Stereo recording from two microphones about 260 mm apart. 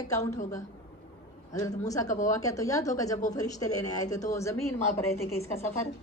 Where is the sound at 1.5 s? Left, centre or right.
Centre.